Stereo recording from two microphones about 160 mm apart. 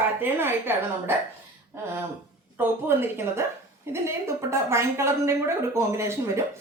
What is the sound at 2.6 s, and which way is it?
Speech, 15° right (ahead or behind).